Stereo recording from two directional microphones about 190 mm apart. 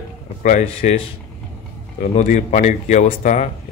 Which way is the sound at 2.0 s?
40° left (ahead or behind).